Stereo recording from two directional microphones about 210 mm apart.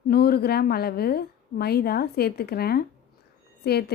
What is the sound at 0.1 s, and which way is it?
A woman's voice, 50° left (ahead or behind).